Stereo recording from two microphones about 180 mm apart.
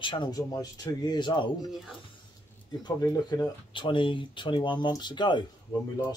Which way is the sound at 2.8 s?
20° left (ahead or behind).